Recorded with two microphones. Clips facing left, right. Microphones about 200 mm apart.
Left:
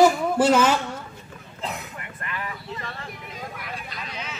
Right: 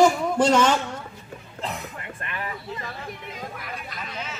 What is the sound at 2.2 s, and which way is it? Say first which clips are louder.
Vehicle: even; 25° right (ahead or behind).